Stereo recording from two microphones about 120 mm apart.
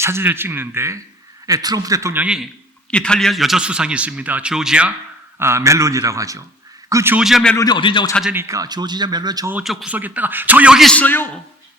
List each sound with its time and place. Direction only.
0.0 s a man's voice: 20° right (ahead or behind)
1.5 s a man's voice: 30° right (ahead or behind)
2.1 s a man's voice: 10° right (ahead or behind)
2.9 s a man's voice: 5° left (ahead or behind)
5.4 s a man's voice: 20° right (ahead or behind)
7.2 s a man's voice: 5° right (ahead or behind)
7.5 s speech: 30° left (ahead or behind)
7.8 s a man's voice: 45° left (ahead or behind)
8.3 s a man's voice: 20° right (ahead or behind)
9.6 s a man's voice: 10° right (ahead or behind)
10.9 s a man's voice: 15° left (ahead or behind)